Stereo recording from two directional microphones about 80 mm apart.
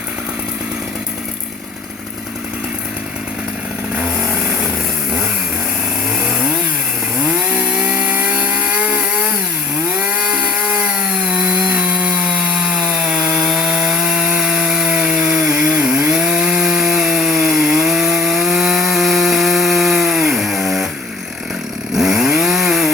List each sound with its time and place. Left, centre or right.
7.5 s chainsaw: centre
10.2 s chainsaw: centre
11.7 s sawing: centre
12.5 s rub: centre
15.6 s chainsaw: centre
21.9 s chainsaw: centre